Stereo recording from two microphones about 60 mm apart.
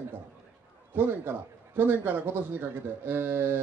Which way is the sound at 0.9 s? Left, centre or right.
Right.